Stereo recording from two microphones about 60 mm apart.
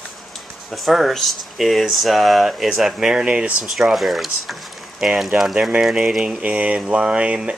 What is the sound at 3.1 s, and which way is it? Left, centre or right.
Speech, centre.